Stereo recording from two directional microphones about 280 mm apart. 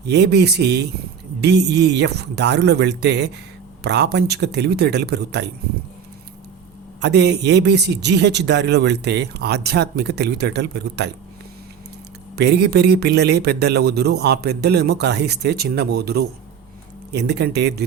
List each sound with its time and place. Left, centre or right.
0.1 s speech: right
7.0 s speech: right
12.4 s speech: right